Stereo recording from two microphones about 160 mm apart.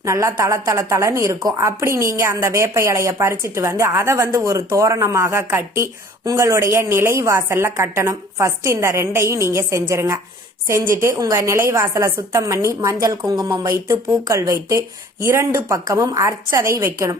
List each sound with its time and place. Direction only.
0.0 s a woman's voice: 20° right (ahead or behind)